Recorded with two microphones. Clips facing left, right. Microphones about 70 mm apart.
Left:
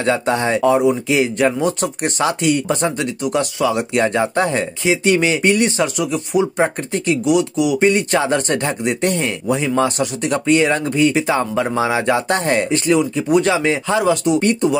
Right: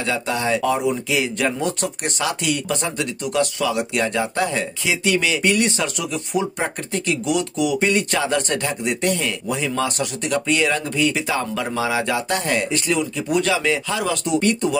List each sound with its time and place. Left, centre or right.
0.0 s speech: left
0.6 s speech: left
1.6 s speech: centre
2.1 s speech: left
5.9 s speech: centre
6.6 s speech: left
7.2 s speech: centre
7.9 s speech: left